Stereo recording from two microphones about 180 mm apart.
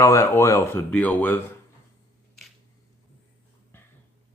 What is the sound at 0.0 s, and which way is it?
Speech, 15° left (ahead or behind).